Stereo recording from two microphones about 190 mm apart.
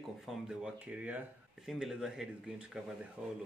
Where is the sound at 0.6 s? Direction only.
5° right (ahead or behind).